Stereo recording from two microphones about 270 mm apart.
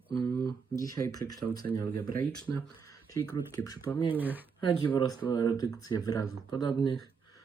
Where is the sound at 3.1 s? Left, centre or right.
Centre.